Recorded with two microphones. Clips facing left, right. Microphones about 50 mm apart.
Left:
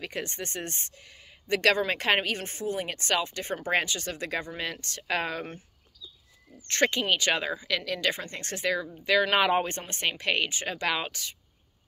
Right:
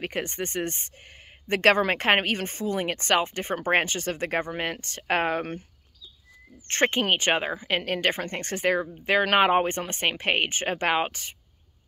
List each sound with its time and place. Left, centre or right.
0.0 s speech: right
6.7 s speech: right